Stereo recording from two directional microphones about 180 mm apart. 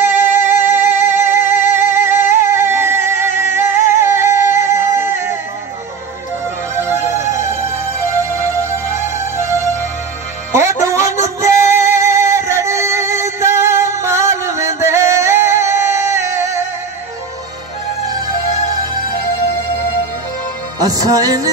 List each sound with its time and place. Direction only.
0.2 s music: 10° right (ahead or behind)
3.8 s a sound: 15° right (ahead or behind)
8.9 s music: 15° right (ahead or behind)
20.8 s music: 20° right (ahead or behind)